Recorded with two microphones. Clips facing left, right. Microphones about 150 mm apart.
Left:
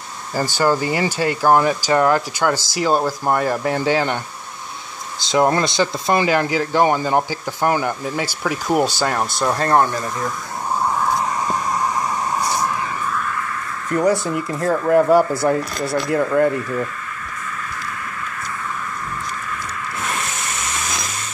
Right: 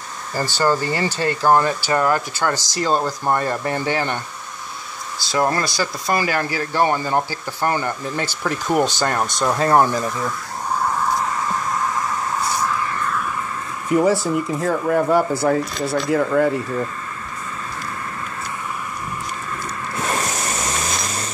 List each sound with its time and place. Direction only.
0.3 s speech: 10° left (ahead or behind)
5.2 s speech: 20° left (ahead or behind); by 9.8 s 5° right (ahead or behind)
12.4 s vehicle: 15° left (ahead or behind)
13.8 s speech: 5° right (ahead or behind)
20.0 s a sound: 40° right (ahead or behind)